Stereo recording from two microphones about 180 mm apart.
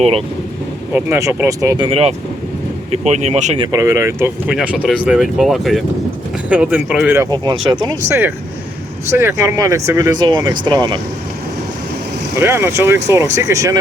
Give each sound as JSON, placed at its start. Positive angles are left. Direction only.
{"t": 0.9, "sound": "speech", "side_deg": -10}
{"t": 3.6, "sound": "speech", "side_deg": -15}
{"t": 7.3, "sound": "speech", "side_deg": -20}
{"t": 12.4, "sound": "speech", "side_deg": -15}